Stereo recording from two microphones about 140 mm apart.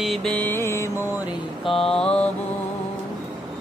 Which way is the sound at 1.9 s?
5° left (ahead or behind).